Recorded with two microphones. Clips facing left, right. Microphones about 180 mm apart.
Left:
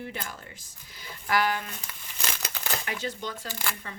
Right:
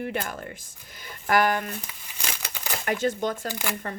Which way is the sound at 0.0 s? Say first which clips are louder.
Right 7 dB; 60° right (ahead or behind).